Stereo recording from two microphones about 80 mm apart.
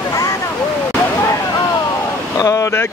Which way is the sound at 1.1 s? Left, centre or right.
Left.